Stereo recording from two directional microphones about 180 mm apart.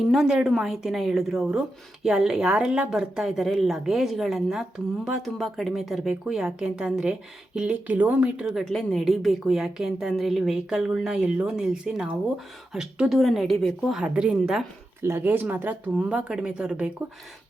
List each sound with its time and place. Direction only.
0.1 s speech: centre (ahead or behind)